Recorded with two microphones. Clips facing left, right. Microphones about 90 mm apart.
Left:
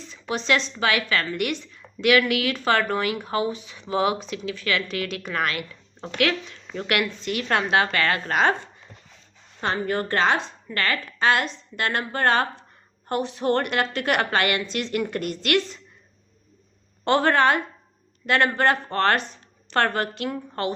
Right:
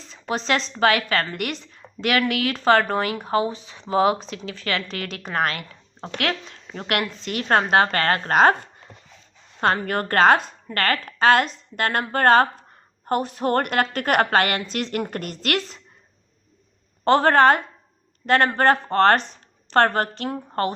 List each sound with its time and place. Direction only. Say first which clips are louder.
0.1 s a sound: even; 40° right (ahead or behind)
0.8 s a woman's voice: right 4 dB; 40° right (ahead or behind)
17.1 s a woman's voice: right 4 dB; 40° right (ahead or behind)